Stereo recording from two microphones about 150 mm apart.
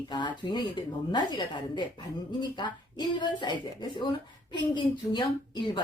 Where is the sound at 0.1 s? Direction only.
30° left (ahead or behind).